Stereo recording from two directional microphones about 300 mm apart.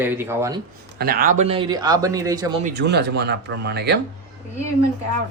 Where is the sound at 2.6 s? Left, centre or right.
Right.